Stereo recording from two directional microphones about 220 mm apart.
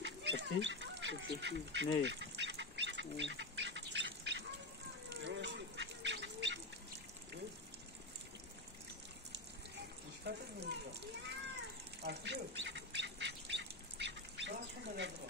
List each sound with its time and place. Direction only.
0.0 s duck: 55° right (ahead or behind)
5.1 s bird: 55° right (ahead or behind)
10.2 s a sound: 50° right (ahead or behind)
12.0 s bird: 50° right (ahead or behind)